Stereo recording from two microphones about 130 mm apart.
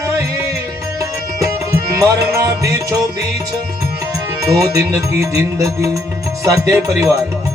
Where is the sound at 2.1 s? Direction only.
25° right (ahead or behind).